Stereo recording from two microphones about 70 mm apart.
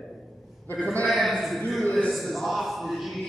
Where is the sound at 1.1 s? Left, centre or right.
Centre.